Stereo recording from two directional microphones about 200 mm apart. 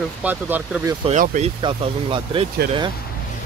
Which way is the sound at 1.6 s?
25° right (ahead or behind).